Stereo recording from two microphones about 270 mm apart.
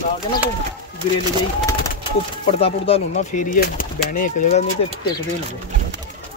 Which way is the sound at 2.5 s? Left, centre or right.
Left.